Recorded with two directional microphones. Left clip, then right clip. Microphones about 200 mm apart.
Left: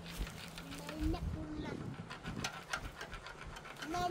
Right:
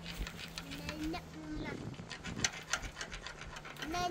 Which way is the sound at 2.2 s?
45° left (ahead or behind).